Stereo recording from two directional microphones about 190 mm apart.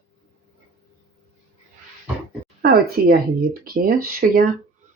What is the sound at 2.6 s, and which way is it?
Speech, 55° right (ahead or behind).